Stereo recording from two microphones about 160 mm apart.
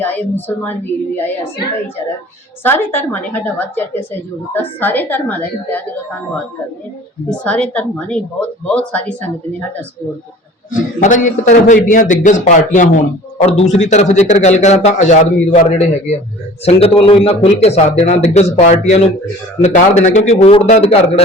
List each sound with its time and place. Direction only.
0.0 s a woman's voice: 10° left (ahead or behind)
2.6 s a woman's voice: 15° left (ahead or behind)
7.3 s a woman's voice: 5° left (ahead or behind)
10.7 s a man's voice: 50° left (ahead or behind)
16.8 s a man's voice: 35° left (ahead or behind)